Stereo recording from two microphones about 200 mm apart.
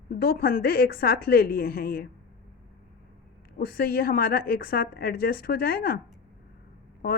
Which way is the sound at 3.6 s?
50° left (ahead or behind).